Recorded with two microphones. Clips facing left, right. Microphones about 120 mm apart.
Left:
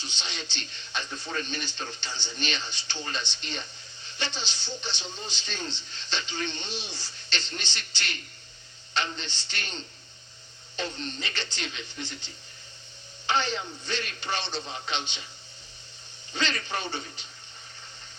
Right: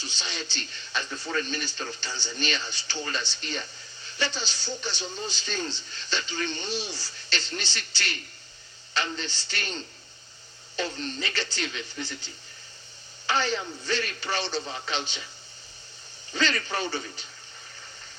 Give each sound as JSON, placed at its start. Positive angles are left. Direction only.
{"t": 0.0, "sound": "speech", "side_deg": -40}
{"t": 10.9, "sound": "speech", "side_deg": -40}
{"t": 16.3, "sound": "speech", "side_deg": -40}